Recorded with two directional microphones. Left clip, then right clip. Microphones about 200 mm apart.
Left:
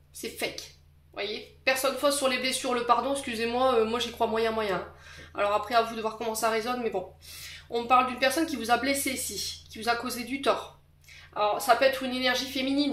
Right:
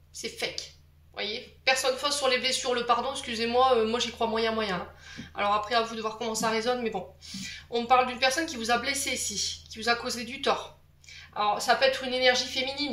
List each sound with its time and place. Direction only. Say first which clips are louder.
0.2 s speech: even; 50° left (ahead or behind)